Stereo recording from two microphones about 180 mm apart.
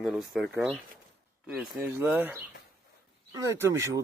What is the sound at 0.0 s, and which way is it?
Speech, centre (ahead or behind).